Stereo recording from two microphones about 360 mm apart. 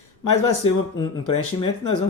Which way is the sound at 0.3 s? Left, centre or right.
Left.